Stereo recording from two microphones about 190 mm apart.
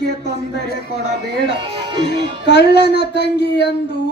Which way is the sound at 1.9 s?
25° right (ahead or behind).